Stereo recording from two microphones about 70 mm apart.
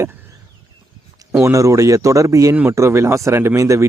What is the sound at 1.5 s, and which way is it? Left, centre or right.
Speech, right.